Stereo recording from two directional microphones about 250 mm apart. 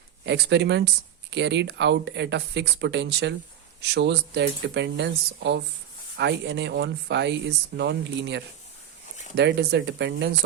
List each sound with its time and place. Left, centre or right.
0.3 s speech: right